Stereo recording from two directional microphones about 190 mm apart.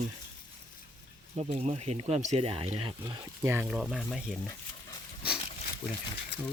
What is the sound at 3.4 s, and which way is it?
Speech, 10° right (ahead or behind).